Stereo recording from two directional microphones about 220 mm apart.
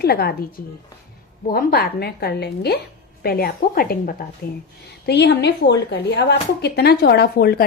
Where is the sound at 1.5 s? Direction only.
45° left (ahead or behind).